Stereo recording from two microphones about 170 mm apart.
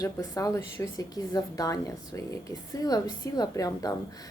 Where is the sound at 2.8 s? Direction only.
20° left (ahead or behind).